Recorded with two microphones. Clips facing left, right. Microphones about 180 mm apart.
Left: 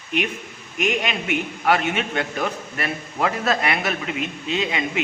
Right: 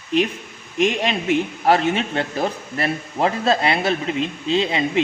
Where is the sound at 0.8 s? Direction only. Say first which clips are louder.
Right 4 dB; 30° right (ahead or behind).